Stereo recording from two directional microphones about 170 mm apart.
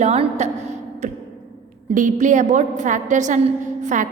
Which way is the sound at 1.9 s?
50° right (ahead or behind).